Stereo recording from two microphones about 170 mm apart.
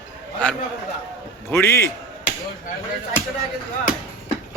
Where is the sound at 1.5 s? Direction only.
15° left (ahead or behind).